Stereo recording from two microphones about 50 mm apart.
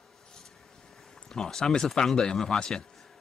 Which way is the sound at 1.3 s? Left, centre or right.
Centre.